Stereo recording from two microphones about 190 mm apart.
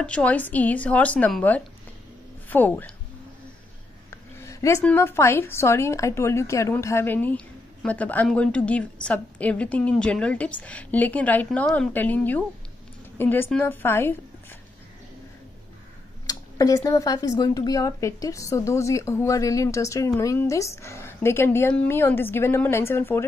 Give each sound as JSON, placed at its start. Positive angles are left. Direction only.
{"t": 0.0, "sound": "a woman's voice", "side_deg": 5}
{"t": 4.1, "sound": "a woman's voice", "side_deg": 15}
{"t": 16.3, "sound": "a woman's voice", "side_deg": 20}